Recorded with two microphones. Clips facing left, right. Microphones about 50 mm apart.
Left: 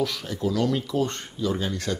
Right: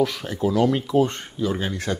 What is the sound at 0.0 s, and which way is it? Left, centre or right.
Speech, right.